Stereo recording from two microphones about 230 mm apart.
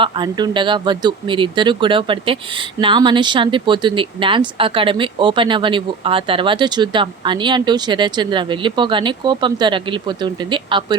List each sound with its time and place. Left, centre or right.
0.0 s speech: centre